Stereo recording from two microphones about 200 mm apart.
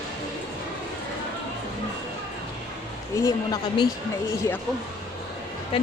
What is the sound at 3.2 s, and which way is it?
Speech, 20° left (ahead or behind).